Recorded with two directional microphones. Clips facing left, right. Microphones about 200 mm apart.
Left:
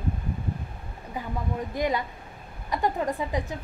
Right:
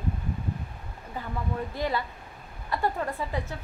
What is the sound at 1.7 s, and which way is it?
Speech, 15° left (ahead or behind).